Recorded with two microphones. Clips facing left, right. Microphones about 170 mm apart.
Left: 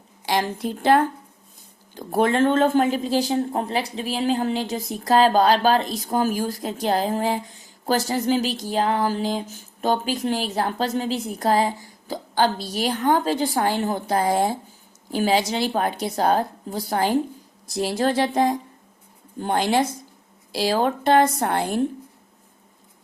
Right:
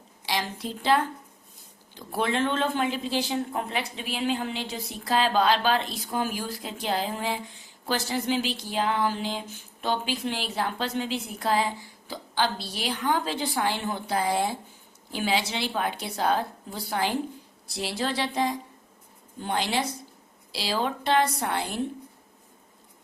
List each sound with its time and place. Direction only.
0.3 s a woman's voice: 50° left (ahead or behind)